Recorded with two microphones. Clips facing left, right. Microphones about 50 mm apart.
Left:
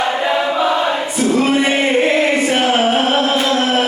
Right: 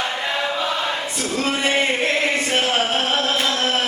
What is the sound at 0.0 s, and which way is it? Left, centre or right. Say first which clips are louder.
Choir: left 7 dB; centre.